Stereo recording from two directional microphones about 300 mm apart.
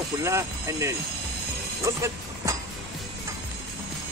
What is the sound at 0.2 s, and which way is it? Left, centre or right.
Speech, centre.